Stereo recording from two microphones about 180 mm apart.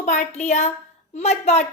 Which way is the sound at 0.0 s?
45° left (ahead or behind).